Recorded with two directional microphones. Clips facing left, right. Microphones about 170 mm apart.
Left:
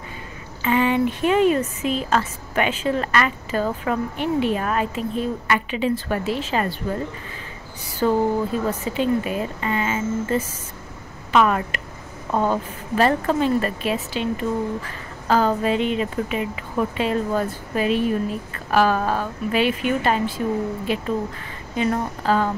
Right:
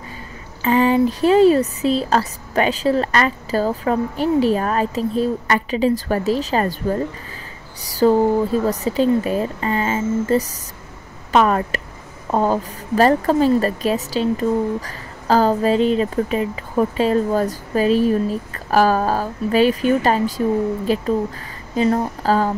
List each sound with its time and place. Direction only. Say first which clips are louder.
0.6 s a woman's voice: right 4 dB; 35° right (ahead or behind)